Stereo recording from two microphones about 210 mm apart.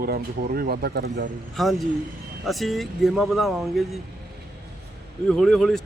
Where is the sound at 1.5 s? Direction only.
Centre (ahead or behind).